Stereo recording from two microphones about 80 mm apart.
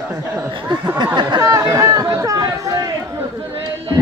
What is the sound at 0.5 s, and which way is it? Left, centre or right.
Speech, right.